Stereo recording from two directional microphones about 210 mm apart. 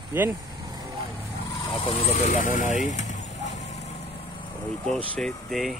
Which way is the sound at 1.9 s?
35° left (ahead or behind).